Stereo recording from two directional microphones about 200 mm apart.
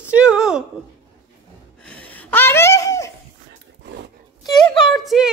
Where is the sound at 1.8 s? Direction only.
5° left (ahead or behind).